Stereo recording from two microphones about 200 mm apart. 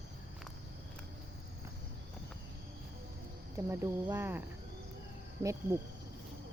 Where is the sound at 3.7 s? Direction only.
15° right (ahead or behind).